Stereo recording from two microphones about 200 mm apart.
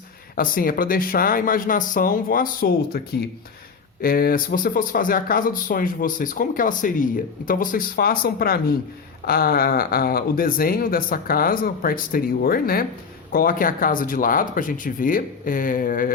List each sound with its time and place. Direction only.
0.3 s speech: 45° left (ahead or behind)